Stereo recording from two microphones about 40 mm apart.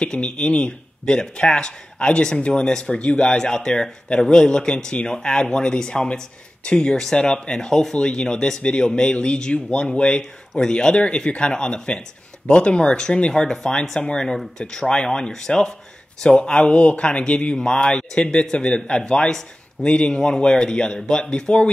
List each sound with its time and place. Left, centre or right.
0.0 s speech: left
0.5 s a man's voice: left
1.0 s a man's voice: left
2.6 s a man's voice: centre
14.6 s a man's voice: centre